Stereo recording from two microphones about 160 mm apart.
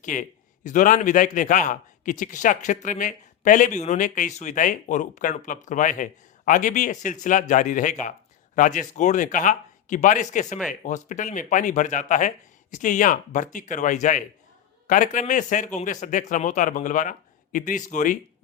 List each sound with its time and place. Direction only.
0.0 s a man's voice: 55° left (ahead or behind)